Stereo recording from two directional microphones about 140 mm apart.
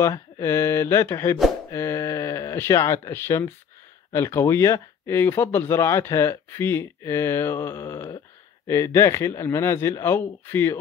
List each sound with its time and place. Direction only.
0.0 s speech: 20° left (ahead or behind)